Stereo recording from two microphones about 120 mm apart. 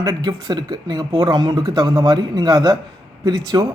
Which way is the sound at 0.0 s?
35° right (ahead or behind).